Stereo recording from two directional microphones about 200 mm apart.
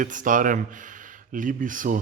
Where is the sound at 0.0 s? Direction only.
40° right (ahead or behind).